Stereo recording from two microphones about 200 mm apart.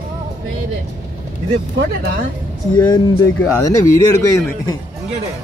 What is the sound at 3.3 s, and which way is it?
Speech, 15° left (ahead or behind).